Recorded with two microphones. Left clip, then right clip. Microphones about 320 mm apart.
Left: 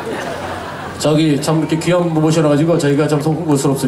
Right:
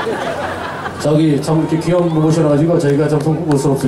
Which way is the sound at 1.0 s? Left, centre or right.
Centre.